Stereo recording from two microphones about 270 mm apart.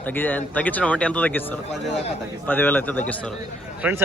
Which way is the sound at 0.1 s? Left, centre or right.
Centre.